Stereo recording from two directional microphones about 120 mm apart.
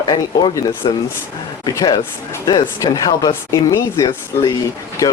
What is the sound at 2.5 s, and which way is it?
Speech, 35° left (ahead or behind).